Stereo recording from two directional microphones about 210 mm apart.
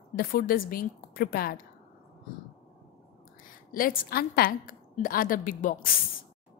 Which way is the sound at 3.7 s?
40° left (ahead or behind).